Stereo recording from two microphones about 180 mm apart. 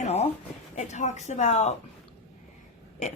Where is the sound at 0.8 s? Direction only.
40° left (ahead or behind).